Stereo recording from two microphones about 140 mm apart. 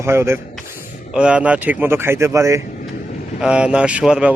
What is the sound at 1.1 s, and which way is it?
Speech, 10° right (ahead or behind).